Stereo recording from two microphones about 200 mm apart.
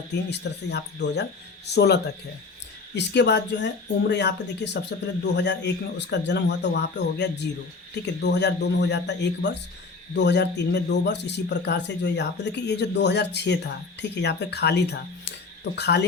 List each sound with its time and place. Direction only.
0.1 s a man's voice: 55° left (ahead or behind)